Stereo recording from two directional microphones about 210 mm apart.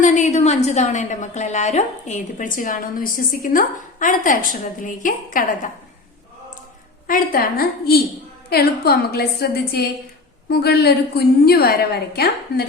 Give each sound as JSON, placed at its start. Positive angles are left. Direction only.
{"t": 0.0, "sound": "a woman's voice", "side_deg": 35}
{"t": 7.1, "sound": "a woman's voice", "side_deg": 45}